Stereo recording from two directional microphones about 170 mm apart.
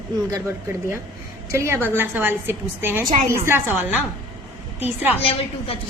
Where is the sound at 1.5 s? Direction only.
15° right (ahead or behind).